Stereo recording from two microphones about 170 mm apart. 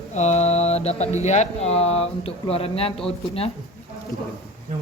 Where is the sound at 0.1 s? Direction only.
40° left (ahead or behind).